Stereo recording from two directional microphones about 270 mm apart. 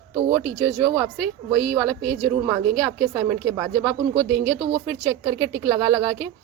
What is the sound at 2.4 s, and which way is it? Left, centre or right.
Speech, centre.